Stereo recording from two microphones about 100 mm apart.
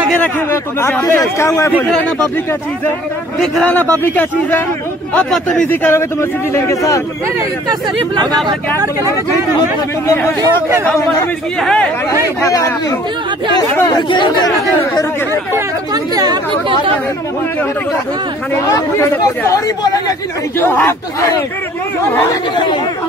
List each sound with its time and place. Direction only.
0.2 s speech: 25° left (ahead or behind)
1.0 s speech: 35° left (ahead or behind)
4.0 s speech: 20° left (ahead or behind)
5.3 s speech: 5° left (ahead or behind)
5.7 s speech: 20° left (ahead or behind)
6.5 s speech: 35° left (ahead or behind)
11.6 s speech: 10° left (ahead or behind)
12.4 s speech: 35° left (ahead or behind)
13.8 s speech: 50° left (ahead or behind)
15.9 s speech: 40° right (ahead or behind)
18.7 s speech: 30° left (ahead or behind)
20.5 s speech: 20° left (ahead or behind)